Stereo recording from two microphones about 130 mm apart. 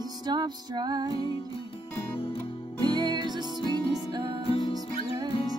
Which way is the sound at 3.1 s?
35° right (ahead or behind).